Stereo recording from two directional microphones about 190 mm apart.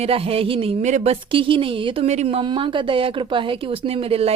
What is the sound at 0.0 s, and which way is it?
Speech, 30° right (ahead or behind).